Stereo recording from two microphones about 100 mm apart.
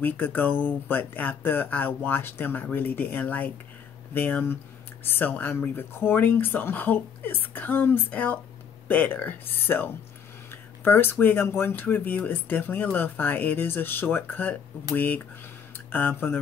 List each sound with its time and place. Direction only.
0.0 s speech: 20° left (ahead or behind)